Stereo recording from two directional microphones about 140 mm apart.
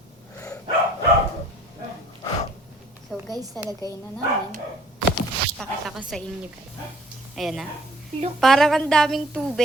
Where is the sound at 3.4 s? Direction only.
25° right (ahead or behind).